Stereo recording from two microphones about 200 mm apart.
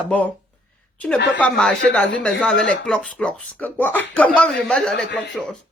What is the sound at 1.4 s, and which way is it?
Speech, 5° left (ahead or behind).